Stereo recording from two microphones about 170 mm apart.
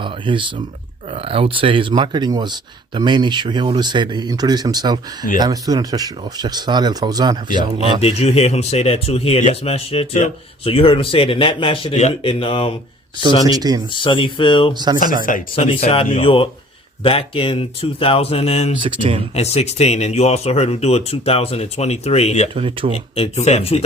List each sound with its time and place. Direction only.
0.0 s speech: 30° right (ahead or behind)
8.0 s speech: 40° left (ahead or behind)
13.4 s speech: 20° right (ahead or behind)
13.9 s speech: 30° left (ahead or behind)
14.7 s speech: 25° right (ahead or behind)
15.2 s speech: 50° left (ahead or behind)
15.5 s speech: 35° left (ahead or behind)
18.8 s speech: 30° right (ahead or behind)
19.3 s speech: 35° left (ahead or behind)
22.5 s speech: 30° right (ahead or behind)
23.1 s speech: 35° left (ahead or behind)